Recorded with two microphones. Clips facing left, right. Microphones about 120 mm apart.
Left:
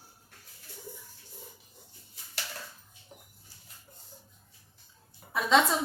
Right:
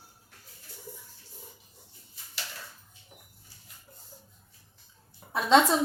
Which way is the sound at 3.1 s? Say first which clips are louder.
Left 3 dB; 25° left (ahead or behind).